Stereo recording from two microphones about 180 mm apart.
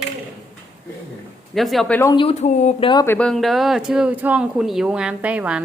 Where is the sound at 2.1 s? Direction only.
35° left (ahead or behind).